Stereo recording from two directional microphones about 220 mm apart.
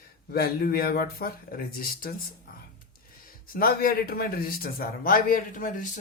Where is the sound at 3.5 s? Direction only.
40° left (ahead or behind).